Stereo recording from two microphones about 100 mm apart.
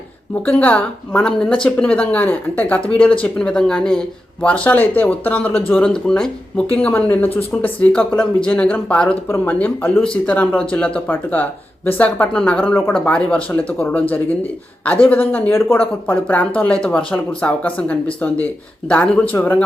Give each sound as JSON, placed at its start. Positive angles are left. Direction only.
{"t": 0.4, "sound": "speech", "side_deg": 15}
{"t": 15.1, "sound": "speech", "side_deg": 20}